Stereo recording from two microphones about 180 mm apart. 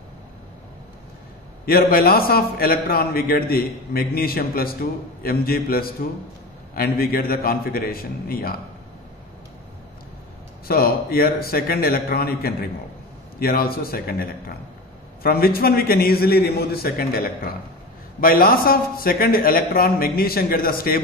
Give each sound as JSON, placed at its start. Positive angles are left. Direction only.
{"t": 1.7, "sound": "a man's voice", "side_deg": 55}
{"t": 10.7, "sound": "a man's voice", "side_deg": 55}
{"t": 15.2, "sound": "a man's voice", "side_deg": 55}